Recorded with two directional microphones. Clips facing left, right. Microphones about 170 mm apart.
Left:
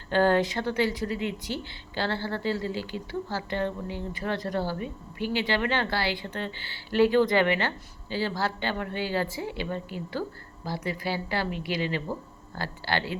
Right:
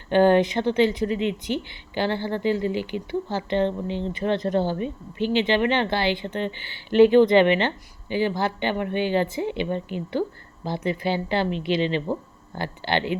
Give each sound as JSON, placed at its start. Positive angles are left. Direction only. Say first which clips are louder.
{"t": 0.1, "sound": "speech", "louder": "right 5 dB", "side_deg": -20}